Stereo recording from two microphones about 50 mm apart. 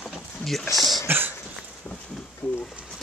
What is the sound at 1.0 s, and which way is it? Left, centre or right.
Cough, right.